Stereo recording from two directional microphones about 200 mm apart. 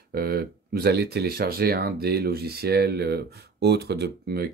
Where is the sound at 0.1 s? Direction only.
50° right (ahead or behind).